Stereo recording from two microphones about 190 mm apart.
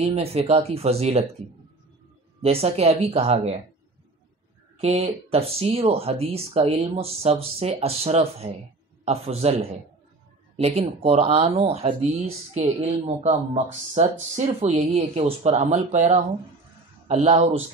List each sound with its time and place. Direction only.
0.0 s speech: 30° right (ahead or behind)
2.4 s speech: 30° right (ahead or behind)
4.8 s speech: 35° right (ahead or behind)